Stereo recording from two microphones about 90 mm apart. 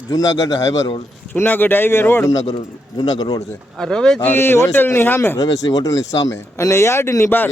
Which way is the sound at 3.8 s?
5° left (ahead or behind).